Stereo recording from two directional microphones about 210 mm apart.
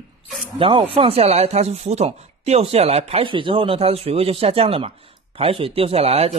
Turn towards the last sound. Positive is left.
turn(degrees=-30)  # may be behind; listen again after turning